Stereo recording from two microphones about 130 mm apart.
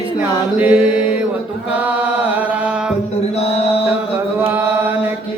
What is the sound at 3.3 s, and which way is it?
Chant, 50° left (ahead or behind).